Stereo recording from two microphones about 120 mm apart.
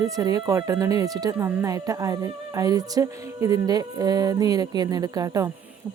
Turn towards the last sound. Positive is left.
turn(degrees=-30)  # may be behind; listen again after turning